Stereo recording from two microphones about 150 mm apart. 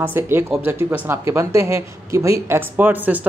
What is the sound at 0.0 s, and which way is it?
Speech, 15° right (ahead or behind).